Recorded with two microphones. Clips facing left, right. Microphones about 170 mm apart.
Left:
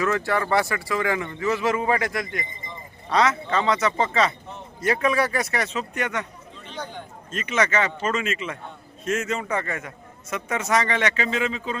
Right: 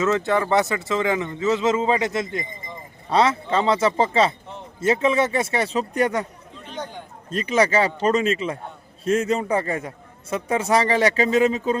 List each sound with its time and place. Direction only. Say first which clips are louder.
0.0 s a man's voice: right 3 dB; 20° right (ahead or behind); by 6.2 s 35° right (ahead or behind)
7.3 s a man's voice: right 5 dB; 35° right (ahead or behind)